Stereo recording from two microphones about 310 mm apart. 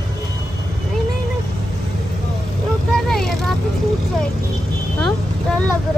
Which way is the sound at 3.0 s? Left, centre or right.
Centre.